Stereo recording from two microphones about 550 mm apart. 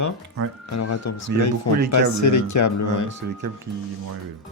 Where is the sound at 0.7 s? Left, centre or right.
Left.